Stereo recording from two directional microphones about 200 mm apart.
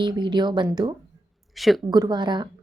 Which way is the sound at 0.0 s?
20° right (ahead or behind).